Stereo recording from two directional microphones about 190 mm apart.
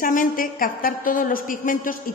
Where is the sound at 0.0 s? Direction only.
45° left (ahead or behind).